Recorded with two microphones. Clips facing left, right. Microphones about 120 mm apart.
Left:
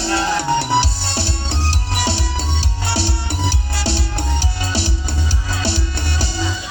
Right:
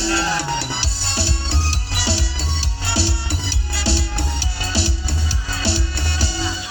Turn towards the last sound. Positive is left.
turn(degrees=50)  # may be behind; listen again after turning